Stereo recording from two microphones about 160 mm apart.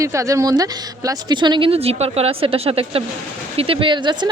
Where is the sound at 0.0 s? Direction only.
20° right (ahead or behind).